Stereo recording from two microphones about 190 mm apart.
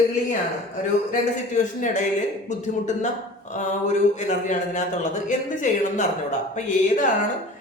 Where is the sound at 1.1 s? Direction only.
40° left (ahead or behind).